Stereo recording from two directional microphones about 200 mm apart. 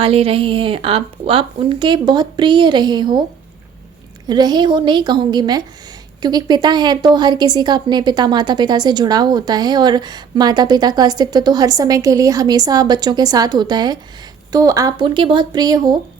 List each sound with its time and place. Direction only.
0.0 s a woman's voice: 30° right (ahead or behind)
4.3 s a woman's voice: 20° right (ahead or behind)